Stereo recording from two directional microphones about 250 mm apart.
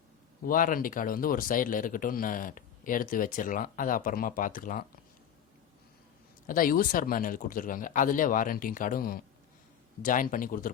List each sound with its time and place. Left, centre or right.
0.4 s speech: left
6.5 s speech: left